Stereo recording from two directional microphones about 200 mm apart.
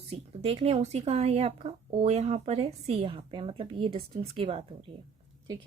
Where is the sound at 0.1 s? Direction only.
30° right (ahead or behind).